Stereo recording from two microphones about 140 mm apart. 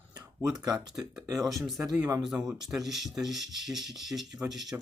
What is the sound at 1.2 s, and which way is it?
Speech, 25° right (ahead or behind).